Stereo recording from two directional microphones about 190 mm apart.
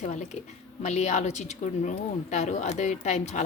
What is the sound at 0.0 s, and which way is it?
A woman's voice, 40° left (ahead or behind).